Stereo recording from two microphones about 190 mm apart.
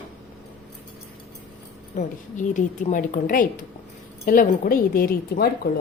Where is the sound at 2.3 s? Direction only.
40° left (ahead or behind).